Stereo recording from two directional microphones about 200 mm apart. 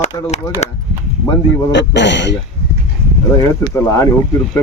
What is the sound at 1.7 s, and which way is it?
Speech, 60° left (ahead or behind).